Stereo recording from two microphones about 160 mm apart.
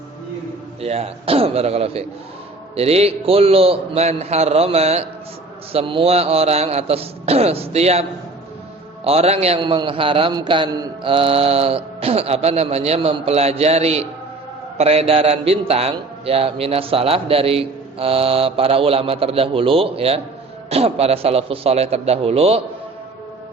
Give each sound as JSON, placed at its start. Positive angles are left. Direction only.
{"t": 0.8, "sound": "a man's voice", "side_deg": -40}
{"t": 9.0, "sound": "a man's voice", "side_deg": -40}